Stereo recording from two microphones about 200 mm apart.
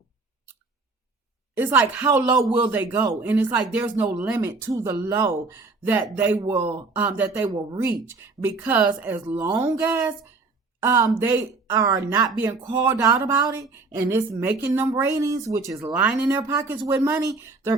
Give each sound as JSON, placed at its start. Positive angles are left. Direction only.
{"t": 1.5, "sound": "a woman's voice", "side_deg": -10}